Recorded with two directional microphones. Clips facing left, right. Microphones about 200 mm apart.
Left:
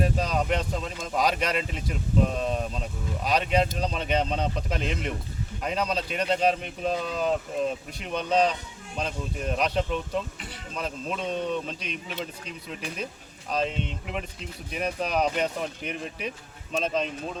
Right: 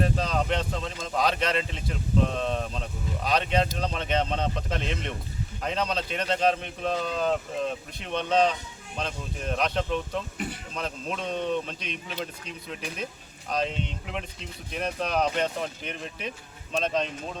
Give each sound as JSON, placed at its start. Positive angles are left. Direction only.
{"t": 0.0, "sound": "speech", "side_deg": 10}
{"t": 10.3, "sound": "a man's voice", "side_deg": -50}
{"t": 10.8, "sound": "speech", "side_deg": 5}
{"t": 13.5, "sound": "speech", "side_deg": 0}